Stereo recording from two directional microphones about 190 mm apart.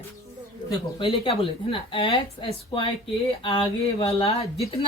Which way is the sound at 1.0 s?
25° left (ahead or behind).